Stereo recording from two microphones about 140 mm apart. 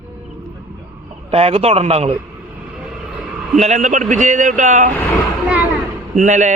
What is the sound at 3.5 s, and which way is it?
A man's voice, 55° right (ahead or behind).